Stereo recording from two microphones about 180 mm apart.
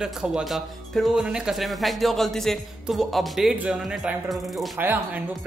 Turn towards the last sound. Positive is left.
turn(degrees=-10)  # may be behind; listen again after turning